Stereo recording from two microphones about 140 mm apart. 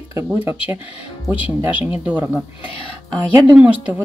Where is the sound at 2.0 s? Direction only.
15° right (ahead or behind).